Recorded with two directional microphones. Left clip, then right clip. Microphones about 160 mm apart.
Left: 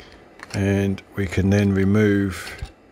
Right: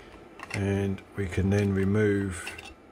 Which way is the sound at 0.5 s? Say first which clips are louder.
Left 7 dB; 50° left (ahead or behind).